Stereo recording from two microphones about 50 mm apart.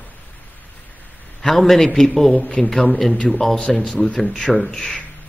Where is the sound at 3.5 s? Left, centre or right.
Centre.